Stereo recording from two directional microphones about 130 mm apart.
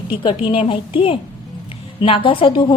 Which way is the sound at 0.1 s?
40° left (ahead or behind).